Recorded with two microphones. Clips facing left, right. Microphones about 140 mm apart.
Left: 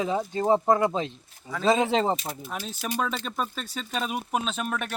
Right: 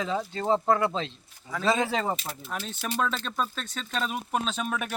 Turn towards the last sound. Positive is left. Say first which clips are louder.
# even
turn(degrees=0)  # may be behind; listen again after turning